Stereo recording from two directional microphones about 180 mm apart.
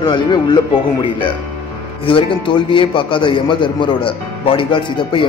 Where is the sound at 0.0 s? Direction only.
25° left (ahead or behind).